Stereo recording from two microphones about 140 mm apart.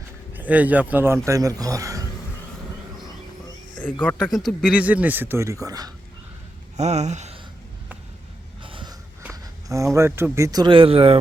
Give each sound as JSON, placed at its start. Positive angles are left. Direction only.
{"t": 0.3, "sound": "a man's voice", "side_deg": -10}
{"t": 4.2, "sound": "a man's voice", "side_deg": 0}
{"t": 6.7, "sound": "speech", "side_deg": -55}
{"t": 8.6, "sound": "wheeze", "side_deg": -35}
{"t": 9.3, "sound": "a sound", "side_deg": -25}
{"t": 10.3, "sound": "speech", "side_deg": -25}